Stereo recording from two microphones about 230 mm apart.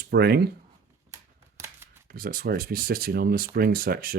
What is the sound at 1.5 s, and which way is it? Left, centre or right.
Shuffling cards, centre.